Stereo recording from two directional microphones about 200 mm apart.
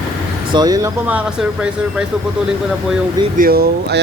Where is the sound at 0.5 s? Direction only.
20° right (ahead or behind).